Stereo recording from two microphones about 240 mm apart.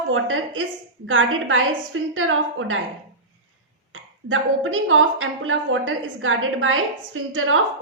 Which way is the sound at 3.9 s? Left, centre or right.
Right.